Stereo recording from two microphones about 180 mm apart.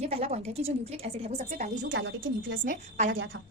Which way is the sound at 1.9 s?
90° right.